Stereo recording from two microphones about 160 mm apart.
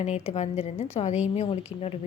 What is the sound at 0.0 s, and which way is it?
A woman's voice, 45° left (ahead or behind).